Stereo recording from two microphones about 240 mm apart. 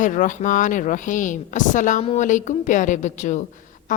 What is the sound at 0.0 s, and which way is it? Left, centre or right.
Speech, left.